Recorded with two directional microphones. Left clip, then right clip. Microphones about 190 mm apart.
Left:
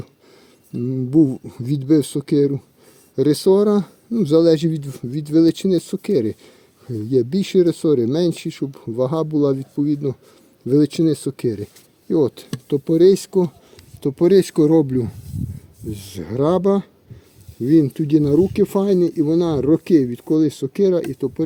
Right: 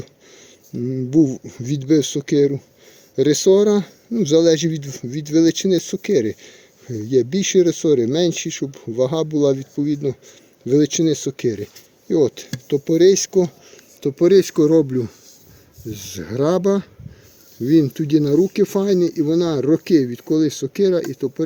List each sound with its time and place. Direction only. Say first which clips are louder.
0.9 s speech: even; 30° left (ahead or behind)
15.9 s speech: even; 25° left (ahead or behind)